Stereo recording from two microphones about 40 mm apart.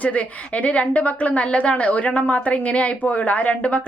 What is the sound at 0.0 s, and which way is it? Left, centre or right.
A woman's voice, left.